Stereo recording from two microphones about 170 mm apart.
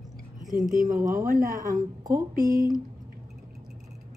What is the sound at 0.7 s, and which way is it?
A woman's voice, 20° right (ahead or behind).